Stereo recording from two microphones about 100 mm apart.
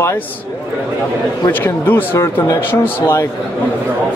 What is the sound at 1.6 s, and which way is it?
Speech, 20° left (ahead or behind).